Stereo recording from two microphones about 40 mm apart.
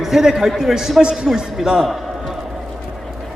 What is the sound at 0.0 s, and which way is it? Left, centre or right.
A man's voice, centre.